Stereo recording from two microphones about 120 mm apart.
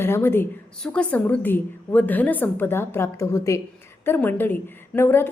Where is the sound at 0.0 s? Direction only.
20° left (ahead or behind).